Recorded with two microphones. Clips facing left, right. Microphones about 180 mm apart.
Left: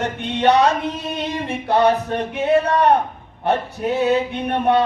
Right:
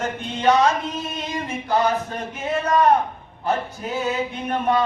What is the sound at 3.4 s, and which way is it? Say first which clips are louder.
Male singing: left 5 dB; 65° left (ahead or behind).